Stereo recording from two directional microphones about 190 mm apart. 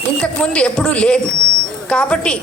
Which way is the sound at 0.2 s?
5° left (ahead or behind).